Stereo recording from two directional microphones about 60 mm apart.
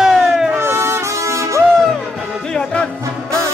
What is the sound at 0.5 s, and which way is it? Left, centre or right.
Music, right.